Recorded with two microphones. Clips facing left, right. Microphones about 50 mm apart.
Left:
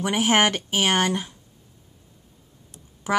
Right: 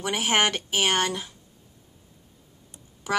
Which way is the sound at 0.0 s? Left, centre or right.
Centre.